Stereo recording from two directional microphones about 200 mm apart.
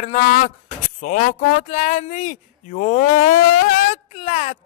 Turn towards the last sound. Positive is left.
turn(degrees=35)  # may be behind; listen again after turning